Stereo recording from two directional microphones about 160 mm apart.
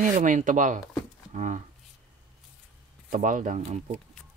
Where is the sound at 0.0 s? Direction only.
55° right (ahead or behind).